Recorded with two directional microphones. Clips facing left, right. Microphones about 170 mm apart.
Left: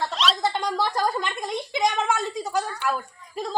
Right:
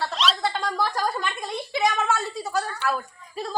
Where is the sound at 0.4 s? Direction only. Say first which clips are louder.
Left 1 dB; 20° left (ahead or behind).